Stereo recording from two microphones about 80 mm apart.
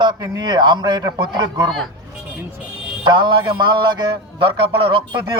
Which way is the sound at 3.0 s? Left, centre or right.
Right.